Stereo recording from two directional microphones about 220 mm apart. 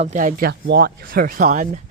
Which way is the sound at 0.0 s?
35° right (ahead or behind).